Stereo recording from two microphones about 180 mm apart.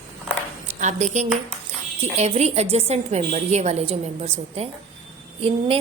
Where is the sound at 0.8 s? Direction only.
40° right (ahead or behind).